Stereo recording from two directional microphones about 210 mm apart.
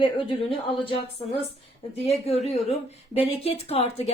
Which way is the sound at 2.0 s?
30° left (ahead or behind).